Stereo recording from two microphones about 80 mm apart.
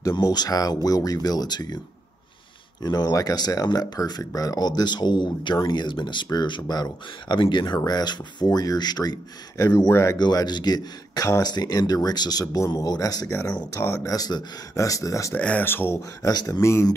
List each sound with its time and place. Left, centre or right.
0.1 s speech: left
2.8 s speech: left
4.2 s speech: left
9.8 s speech: left
10.1 s speech: left
11.5 s speech: left
13.7 s speech: left
15.3 s speech: left
16.2 s speech: left